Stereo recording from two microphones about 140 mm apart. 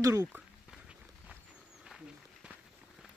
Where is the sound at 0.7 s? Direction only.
5° right (ahead or behind).